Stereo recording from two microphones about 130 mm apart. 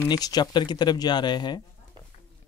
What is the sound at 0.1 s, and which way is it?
Speech, 30° left (ahead or behind).